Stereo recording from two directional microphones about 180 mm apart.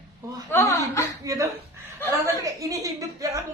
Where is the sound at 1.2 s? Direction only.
20° right (ahead or behind).